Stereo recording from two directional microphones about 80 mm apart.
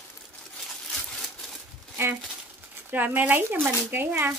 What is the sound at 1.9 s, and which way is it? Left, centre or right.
Crumpling, right.